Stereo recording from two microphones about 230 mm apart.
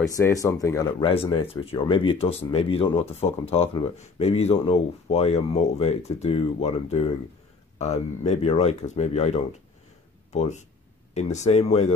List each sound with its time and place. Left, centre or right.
0.1 s speech: centre